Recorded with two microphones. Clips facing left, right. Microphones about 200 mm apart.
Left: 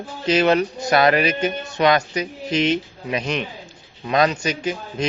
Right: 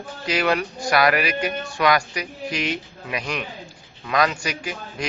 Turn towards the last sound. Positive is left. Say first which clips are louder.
# left 6 dB
turn(degrees=25)  # may be behind; listen again after turning